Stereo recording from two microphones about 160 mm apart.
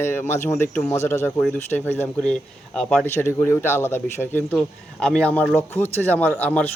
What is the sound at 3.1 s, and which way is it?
A man's voice, 15° left (ahead or behind).